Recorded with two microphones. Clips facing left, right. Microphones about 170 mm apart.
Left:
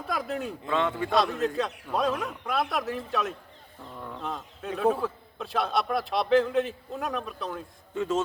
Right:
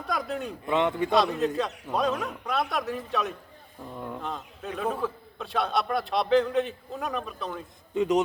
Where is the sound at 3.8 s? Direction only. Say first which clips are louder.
Right 4 dB; 15° right (ahead or behind).